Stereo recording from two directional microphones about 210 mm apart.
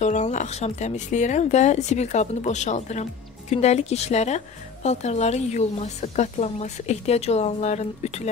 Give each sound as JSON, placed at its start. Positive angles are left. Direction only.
{"t": 0.0, "sound": "a woman's voice", "side_deg": 35}